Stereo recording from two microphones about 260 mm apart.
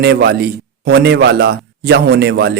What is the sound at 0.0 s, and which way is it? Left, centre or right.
A man's voice, right.